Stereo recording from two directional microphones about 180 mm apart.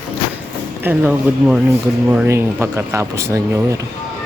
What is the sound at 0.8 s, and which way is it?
Speech, 10° right (ahead or behind).